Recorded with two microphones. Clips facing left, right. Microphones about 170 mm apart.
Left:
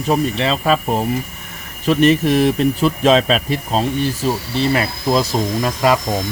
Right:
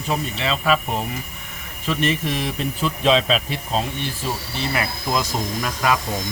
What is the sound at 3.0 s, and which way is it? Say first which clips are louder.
Speech: left 2 dB; 45° left (ahead or behind).